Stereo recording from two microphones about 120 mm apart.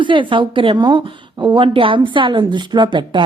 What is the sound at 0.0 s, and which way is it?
A woman's voice, 45° right (ahead or behind).